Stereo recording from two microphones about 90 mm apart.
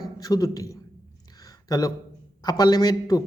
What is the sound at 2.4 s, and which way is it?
Speech, 50° left (ahead or behind).